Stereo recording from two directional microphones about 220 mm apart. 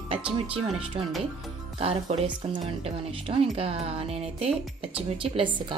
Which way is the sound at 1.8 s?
25° right (ahead or behind).